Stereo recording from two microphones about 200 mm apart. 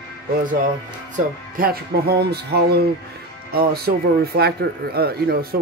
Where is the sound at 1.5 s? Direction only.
50° right (ahead or behind).